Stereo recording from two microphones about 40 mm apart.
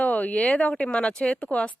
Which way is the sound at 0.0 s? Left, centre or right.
Left.